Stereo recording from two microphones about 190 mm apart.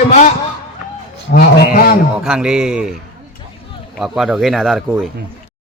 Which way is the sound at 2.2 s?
5° right (ahead or behind).